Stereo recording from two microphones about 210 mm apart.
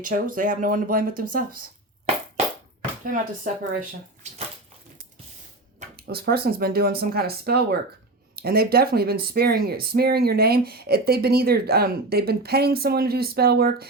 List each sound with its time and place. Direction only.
0.0 s speech: 40° right (ahead or behind)
3.7 s speech: 35° right (ahead or behind)
6.1 s speech: 50° right (ahead or behind)